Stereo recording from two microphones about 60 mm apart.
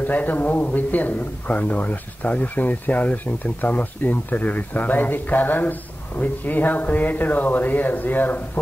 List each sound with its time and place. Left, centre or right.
0.0 s speech: left